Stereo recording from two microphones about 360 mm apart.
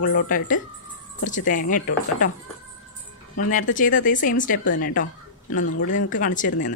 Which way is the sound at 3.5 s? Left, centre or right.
Left.